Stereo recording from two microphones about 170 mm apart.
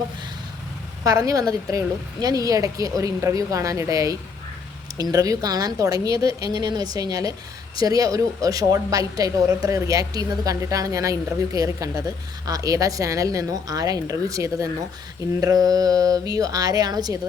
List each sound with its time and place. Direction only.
1.0 s a woman's voice: 20° right (ahead or behind)